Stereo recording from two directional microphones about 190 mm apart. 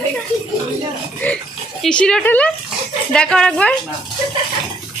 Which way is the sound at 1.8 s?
5° left (ahead or behind).